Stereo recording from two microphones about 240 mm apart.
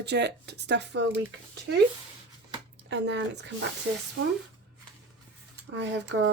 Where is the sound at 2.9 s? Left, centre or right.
Right.